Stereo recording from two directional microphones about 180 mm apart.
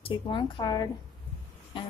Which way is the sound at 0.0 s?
30° left (ahead or behind).